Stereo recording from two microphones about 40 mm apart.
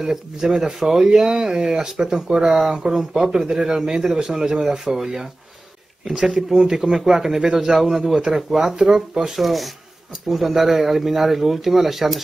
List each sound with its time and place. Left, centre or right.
0.0 s speech: centre
9.4 s speech: centre